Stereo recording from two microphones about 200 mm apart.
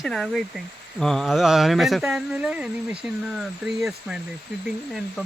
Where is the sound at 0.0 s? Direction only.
Centre (ahead or behind).